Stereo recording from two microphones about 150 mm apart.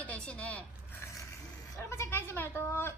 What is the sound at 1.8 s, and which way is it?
A woman's voice, 20° left (ahead or behind).